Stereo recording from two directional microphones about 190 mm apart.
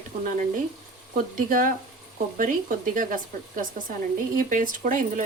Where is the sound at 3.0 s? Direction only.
45° right (ahead or behind).